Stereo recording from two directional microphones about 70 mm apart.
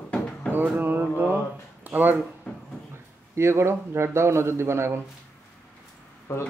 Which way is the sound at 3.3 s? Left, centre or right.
Right.